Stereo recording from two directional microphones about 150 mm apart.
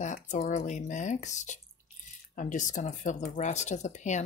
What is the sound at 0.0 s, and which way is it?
Speech, 55° left (ahead or behind).